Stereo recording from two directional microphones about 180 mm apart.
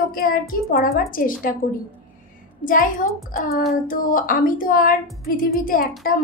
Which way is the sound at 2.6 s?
50° left (ahead or behind).